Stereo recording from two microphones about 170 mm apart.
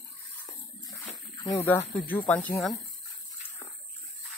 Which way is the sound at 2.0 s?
10° left (ahead or behind).